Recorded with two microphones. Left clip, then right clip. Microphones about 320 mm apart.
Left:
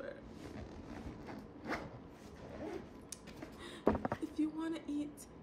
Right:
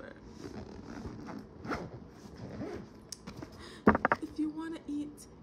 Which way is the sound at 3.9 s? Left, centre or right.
Right.